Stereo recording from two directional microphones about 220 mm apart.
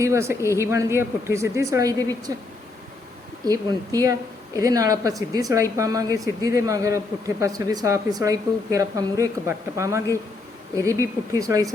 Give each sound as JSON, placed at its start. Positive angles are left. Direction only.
{"t": 0.0, "sound": "speech", "side_deg": -15}
{"t": 3.4, "sound": "speech", "side_deg": -15}